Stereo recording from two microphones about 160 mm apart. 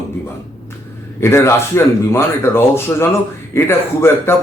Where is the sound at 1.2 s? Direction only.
15° left (ahead or behind).